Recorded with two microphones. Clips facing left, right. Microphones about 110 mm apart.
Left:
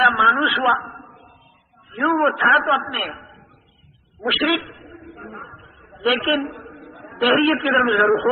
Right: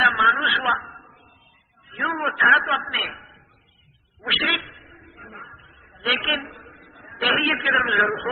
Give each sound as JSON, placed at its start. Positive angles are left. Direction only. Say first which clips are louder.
{"t": 0.0, "sound": "a sound", "louder": "left 3 dB", "side_deg": 30}
{"t": 1.9, "sound": "a man's voice", "louder": "left 7 dB", "side_deg": 30}
{"t": 4.4, "sound": "a man's voice", "louder": "left 7 dB", "side_deg": 30}